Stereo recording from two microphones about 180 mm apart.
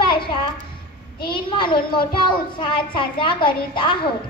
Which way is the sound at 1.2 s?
25° left (ahead or behind).